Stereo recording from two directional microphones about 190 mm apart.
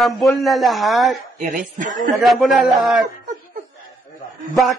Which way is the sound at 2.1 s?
Centre (ahead or behind).